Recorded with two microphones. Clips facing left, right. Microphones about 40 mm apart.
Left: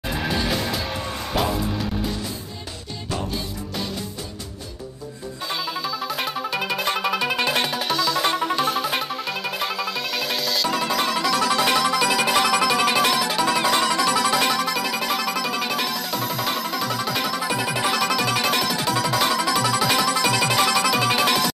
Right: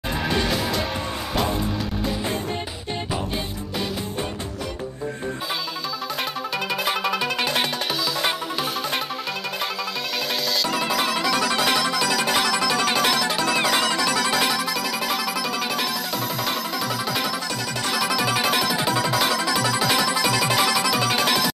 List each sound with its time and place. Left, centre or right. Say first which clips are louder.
0.3 s music: right 1 dB; centre
6.8 s music: even; centre
10.6 s music: left 1 dB; centre
12.8 s music: left 1 dB; centre